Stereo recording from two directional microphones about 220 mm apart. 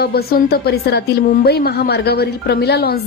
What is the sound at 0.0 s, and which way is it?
A woman's voice, 45° left (ahead or behind).